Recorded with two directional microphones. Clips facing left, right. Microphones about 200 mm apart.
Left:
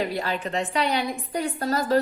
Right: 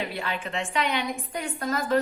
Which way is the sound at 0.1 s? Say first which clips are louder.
Left 4 dB; 40° left (ahead or behind).